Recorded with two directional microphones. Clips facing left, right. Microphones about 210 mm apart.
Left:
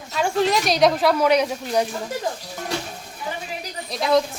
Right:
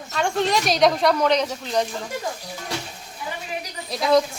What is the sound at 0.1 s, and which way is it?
A woman's voice, 5° left (ahead or behind).